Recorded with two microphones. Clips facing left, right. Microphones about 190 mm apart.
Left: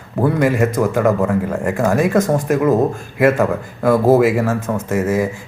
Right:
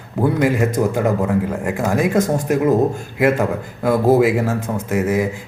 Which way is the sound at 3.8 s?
20° right (ahead or behind).